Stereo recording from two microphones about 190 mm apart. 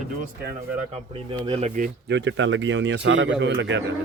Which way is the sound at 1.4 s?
30° right (ahead or behind).